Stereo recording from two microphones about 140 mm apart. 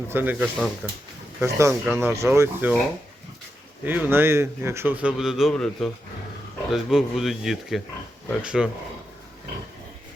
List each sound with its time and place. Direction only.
0.1 s a man's voice: 15° right (ahead or behind)
1.4 s a man's voice: 20° right (ahead or behind)
3.8 s a man's voice: 15° right (ahead or behind)